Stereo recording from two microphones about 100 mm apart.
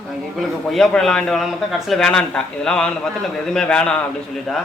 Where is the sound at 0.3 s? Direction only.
5° left (ahead or behind).